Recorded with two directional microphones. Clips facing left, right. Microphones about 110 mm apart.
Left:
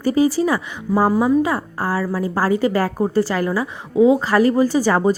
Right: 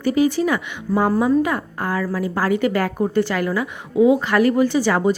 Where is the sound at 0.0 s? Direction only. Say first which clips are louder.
Left 1 dB; 35° left (ahead or behind).